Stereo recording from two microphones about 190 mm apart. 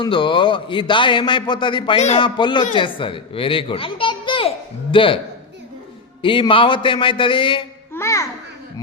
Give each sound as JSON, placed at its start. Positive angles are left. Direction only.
{"t": 0.0, "sound": "a man's voice", "side_deg": 25}
{"t": 6.2, "sound": "a man's voice", "side_deg": 25}
{"t": 7.9, "sound": "a child's voice", "side_deg": 15}